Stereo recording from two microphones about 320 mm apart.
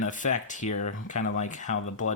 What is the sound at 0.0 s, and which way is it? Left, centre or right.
Speech, left.